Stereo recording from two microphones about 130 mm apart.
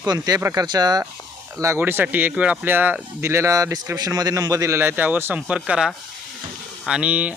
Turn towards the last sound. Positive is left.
turn(degrees=-10)  # may be behind; listen again after turning